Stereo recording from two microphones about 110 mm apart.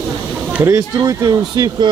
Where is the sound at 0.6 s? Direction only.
30° right (ahead or behind).